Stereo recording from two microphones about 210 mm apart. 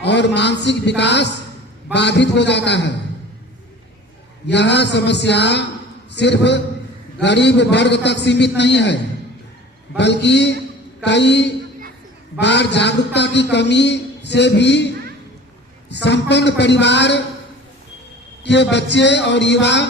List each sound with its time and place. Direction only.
0.0 s a man's voice: 55° left (ahead or behind)
4.4 s a man's voice: 55° left (ahead or behind)
10.0 s a man's voice: 55° left (ahead or behind)
15.9 s a man's voice: 55° left (ahead or behind)
18.4 s a man's voice: 55° left (ahead or behind)